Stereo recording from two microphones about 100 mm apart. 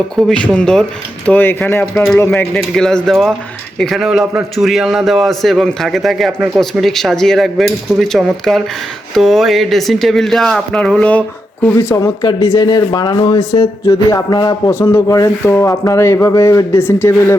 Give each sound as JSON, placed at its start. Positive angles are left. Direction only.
{"t": 0.2, "sound": "speech", "side_deg": 10}
{"t": 1.3, "sound": "speech", "side_deg": 15}
{"t": 2.3, "sound": "a man's voice", "side_deg": 5}
{"t": 11.6, "sound": "speech", "side_deg": 20}
{"t": 12.2, "sound": "speech", "side_deg": 50}
{"t": 14.7, "sound": "speech", "side_deg": 25}